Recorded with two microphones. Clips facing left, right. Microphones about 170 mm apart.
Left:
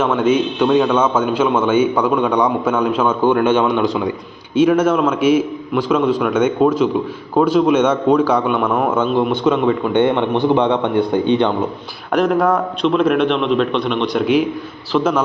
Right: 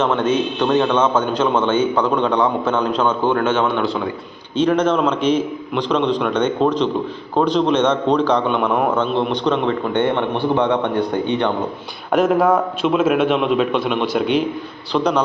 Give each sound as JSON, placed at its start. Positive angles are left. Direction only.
{"t": 0.0, "sound": "a man's voice", "side_deg": 10}
{"t": 12.1, "sound": "a man's voice", "side_deg": 0}